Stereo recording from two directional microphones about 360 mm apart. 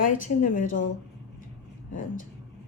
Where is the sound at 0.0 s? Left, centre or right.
Left.